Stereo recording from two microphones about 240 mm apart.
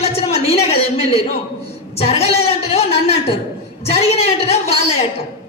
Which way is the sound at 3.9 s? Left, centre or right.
Left.